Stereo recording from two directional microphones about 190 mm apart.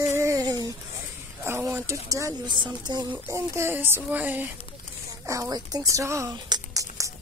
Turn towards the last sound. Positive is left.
turn(degrees=-15)  # may be behind; listen again after turning